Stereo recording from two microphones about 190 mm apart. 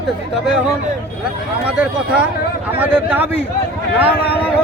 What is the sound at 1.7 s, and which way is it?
Speech, 5° right (ahead or behind).